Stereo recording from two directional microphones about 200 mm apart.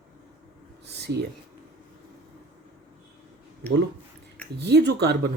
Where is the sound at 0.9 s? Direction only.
55° right (ahead or behind).